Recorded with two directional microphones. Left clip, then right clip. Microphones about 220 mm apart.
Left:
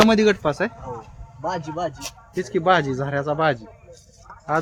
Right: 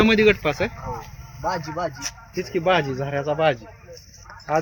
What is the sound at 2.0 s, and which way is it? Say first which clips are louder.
Speech: even; 30° left (ahead or behind).